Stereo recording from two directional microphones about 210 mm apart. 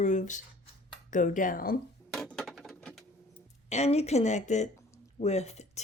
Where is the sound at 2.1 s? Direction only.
Centre (ahead or behind).